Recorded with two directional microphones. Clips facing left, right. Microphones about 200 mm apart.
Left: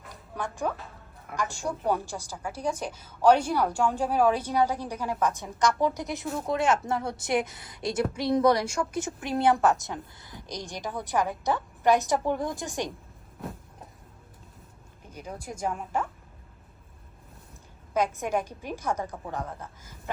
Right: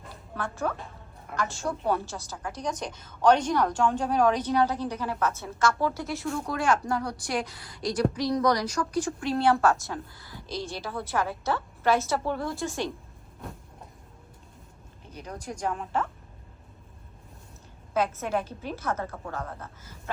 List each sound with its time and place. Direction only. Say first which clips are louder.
0.3 s a woman's voice: even; 15° left (ahead or behind)
15.1 s a woman's voice: right 1 dB; 10° left (ahead or behind)
17.9 s a woman's voice: even; 15° left (ahead or behind)